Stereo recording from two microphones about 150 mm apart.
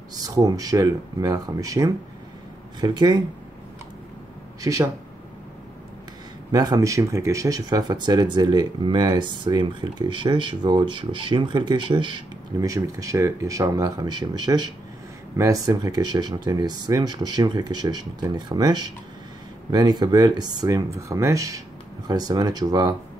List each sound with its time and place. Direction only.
0.1 s speech: 25° right (ahead or behind)
4.6 s speech: 20° right (ahead or behind)
6.5 s speech: 25° right (ahead or behind)